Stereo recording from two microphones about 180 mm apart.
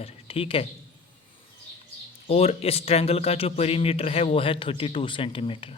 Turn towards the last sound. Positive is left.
turn(degrees=30)  # may be behind; listen again after turning